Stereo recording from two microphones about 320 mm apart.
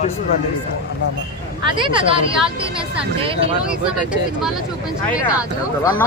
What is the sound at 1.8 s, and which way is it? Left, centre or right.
Speech, centre.